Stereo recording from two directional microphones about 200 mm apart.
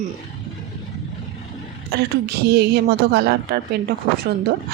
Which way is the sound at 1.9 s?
55° right (ahead or behind).